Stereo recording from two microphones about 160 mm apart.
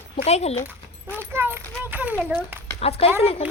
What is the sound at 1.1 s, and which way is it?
A child's voice, 15° right (ahead or behind).